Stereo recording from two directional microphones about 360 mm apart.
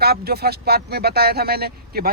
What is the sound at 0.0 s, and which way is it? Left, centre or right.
Speech, right.